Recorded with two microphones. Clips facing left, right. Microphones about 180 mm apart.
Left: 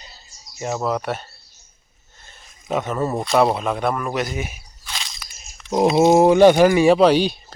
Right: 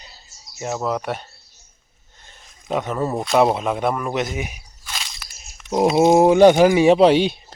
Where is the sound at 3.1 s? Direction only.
Centre (ahead or behind).